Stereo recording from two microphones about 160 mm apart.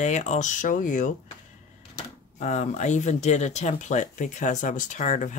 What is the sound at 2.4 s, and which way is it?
Speech, 45° left (ahead or behind).